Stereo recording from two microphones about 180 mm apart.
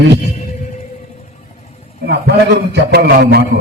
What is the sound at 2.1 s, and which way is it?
A man's voice, 65° right (ahead or behind).